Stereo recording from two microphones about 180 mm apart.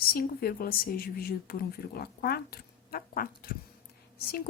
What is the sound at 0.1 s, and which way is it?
Speech, 55° left (ahead or behind).